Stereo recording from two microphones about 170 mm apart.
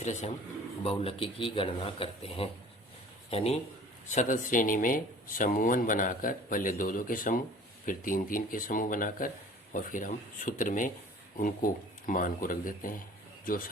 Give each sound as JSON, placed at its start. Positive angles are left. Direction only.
{"t": 0.0, "sound": "speech", "side_deg": 45}
{"t": 0.9, "sound": "a man's voice", "side_deg": 35}
{"t": 4.1, "sound": "speech", "side_deg": 45}